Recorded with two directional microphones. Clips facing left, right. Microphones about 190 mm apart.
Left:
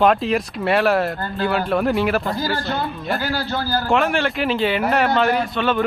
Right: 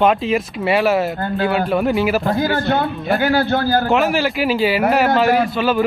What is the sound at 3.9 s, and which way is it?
Speech, 5° right (ahead or behind).